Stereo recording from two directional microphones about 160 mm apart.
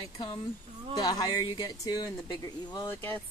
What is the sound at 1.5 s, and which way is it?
Speech, 25° left (ahead or behind).